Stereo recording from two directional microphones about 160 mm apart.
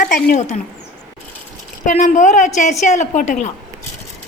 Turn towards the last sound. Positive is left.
turn(degrees=45)  # may be behind; listen again after turning